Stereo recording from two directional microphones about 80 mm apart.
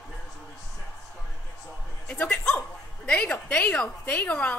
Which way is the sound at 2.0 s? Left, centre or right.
Centre.